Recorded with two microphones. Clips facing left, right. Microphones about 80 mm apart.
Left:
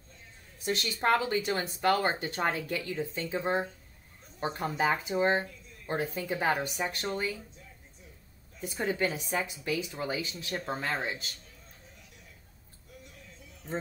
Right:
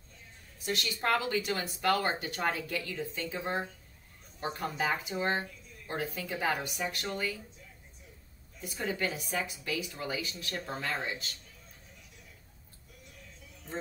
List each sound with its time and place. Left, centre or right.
0.6 s a woman's voice: left
8.5 s speech: left